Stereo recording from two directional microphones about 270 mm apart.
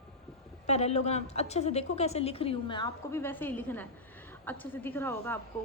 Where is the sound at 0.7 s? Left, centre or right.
Left.